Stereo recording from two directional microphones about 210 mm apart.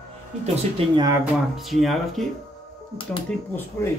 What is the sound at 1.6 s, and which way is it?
Speech, centre (ahead or behind).